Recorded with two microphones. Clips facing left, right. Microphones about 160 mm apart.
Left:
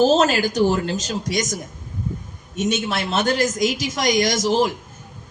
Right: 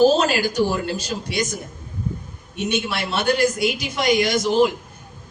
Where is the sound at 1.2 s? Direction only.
40° left (ahead or behind).